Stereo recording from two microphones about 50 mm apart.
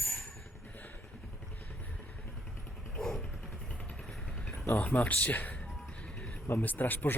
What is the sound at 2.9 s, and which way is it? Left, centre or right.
Vehicle, centre.